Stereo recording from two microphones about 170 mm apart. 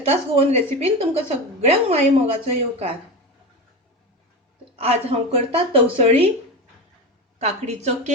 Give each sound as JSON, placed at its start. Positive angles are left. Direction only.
{"t": 0.0, "sound": "a woman's voice", "side_deg": -40}
{"t": 4.8, "sound": "a woman's voice", "side_deg": -35}
{"t": 7.3, "sound": "a woman's voice", "side_deg": -40}